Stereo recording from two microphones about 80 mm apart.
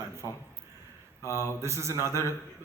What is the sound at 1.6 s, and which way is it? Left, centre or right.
Speech, right.